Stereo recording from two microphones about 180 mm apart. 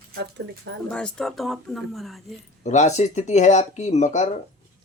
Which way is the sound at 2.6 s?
40° left (ahead or behind).